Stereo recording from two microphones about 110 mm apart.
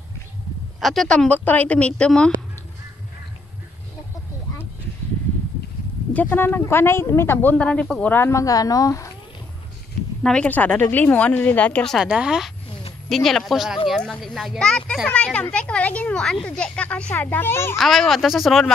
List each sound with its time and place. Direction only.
0.7 s a child's voice: centre (ahead or behind)
6.1 s speech: 15° left (ahead or behind)
7.5 s speech: 10° left (ahead or behind); by 9.1 s 30° left (ahead or behind)
10.2 s a child's voice: 10° left (ahead or behind)
12.0 s a child's voice: 5° right (ahead or behind); by 17.7 s 20° left (ahead or behind)
17.7 s speech: centre (ahead or behind)